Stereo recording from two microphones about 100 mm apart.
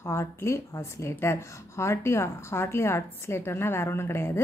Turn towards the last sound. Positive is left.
turn(degrees=25)  # may be behind; listen again after turning